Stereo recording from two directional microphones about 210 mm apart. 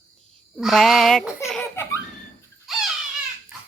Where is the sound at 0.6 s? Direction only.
Centre (ahead or behind).